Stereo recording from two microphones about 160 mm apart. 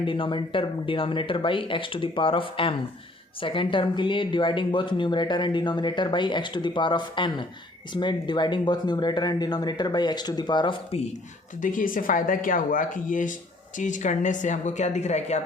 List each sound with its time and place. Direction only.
0.0 s speech: 30° left (ahead or behind)
11.6 s speech: 55° left (ahead or behind)